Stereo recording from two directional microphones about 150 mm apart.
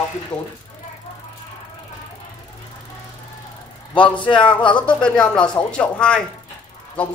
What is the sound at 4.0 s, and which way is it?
Speech, 35° left (ahead or behind).